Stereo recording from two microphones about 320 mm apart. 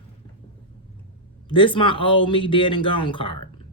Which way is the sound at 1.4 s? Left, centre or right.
Centre.